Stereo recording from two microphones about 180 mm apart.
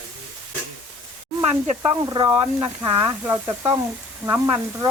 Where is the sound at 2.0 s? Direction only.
25° right (ahead or behind).